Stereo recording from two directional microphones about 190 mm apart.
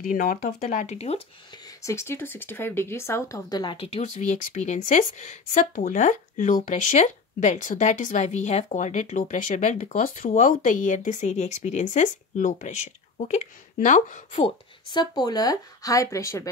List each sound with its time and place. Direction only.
0.0 s speech: 45° left (ahead or behind)
1.8 s speech: 15° left (ahead or behind); by 14.5 s 40° left (ahead or behind)
14.9 s speech: 20° left (ahead or behind)